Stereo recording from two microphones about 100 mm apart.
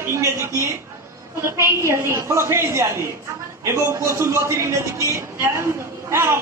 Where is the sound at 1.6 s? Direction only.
25° right (ahead or behind).